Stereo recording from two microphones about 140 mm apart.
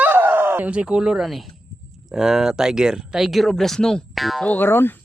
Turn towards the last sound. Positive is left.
turn(degrees=15)  # may be behind; listen again after turning